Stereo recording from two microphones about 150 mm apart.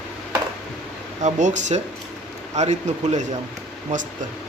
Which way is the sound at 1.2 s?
55° right (ahead or behind).